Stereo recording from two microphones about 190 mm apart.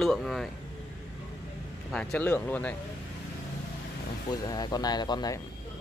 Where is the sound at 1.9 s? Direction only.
5° left (ahead or behind).